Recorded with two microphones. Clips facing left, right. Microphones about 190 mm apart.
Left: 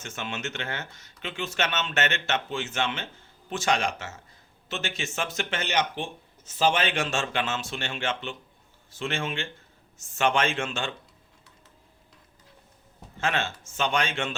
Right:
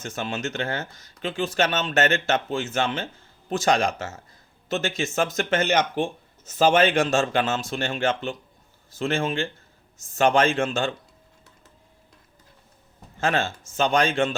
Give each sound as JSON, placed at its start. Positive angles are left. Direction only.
{"t": 0.0, "sound": "speech", "side_deg": -35}
{"t": 13.1, "sound": "speech", "side_deg": -35}